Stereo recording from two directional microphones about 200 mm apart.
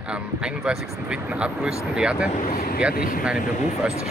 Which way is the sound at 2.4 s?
45° left (ahead or behind).